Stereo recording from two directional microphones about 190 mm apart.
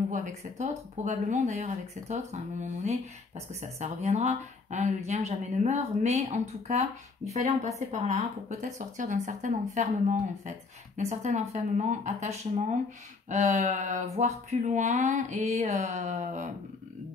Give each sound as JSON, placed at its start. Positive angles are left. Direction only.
{"t": 0.1, "sound": "speech", "side_deg": -40}